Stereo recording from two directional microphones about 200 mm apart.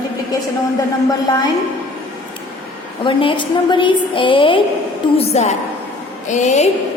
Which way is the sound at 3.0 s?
25° left (ahead or behind).